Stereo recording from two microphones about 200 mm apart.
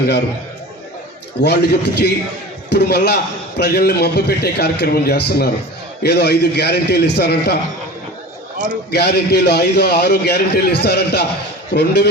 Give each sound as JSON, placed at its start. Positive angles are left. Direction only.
{"t": 1.4, "sound": "a man's voice", "side_deg": 55}